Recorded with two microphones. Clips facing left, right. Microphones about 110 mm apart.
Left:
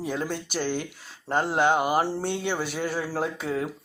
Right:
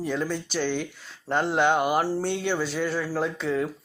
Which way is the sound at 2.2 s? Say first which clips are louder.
Right 2 dB; 50° left (ahead or behind).